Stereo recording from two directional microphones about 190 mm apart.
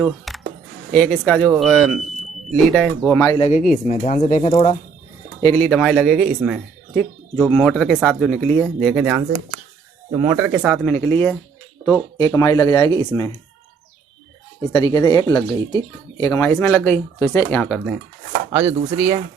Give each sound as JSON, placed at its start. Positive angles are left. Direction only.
{"t": 0.0, "sound": "music", "side_deg": 0}
{"t": 0.9, "sound": "speech", "side_deg": 5}
{"t": 3.2, "sound": "speech", "side_deg": 20}
{"t": 3.5, "sound": "speech", "side_deg": 45}
{"t": 3.9, "sound": "speech", "side_deg": 35}
{"t": 5.4, "sound": "speech", "side_deg": 15}
{"t": 5.7, "sound": "speech", "side_deg": 0}
{"t": 10.1, "sound": "speech", "side_deg": -25}
{"t": 10.3, "sound": "speech", "side_deg": -10}
{"t": 10.8, "sound": "speech", "side_deg": 5}
{"t": 14.9, "sound": "speech", "side_deg": 20}
{"t": 17.6, "sound": "speech", "side_deg": 5}
{"t": 18.9, "sound": "speech", "side_deg": -15}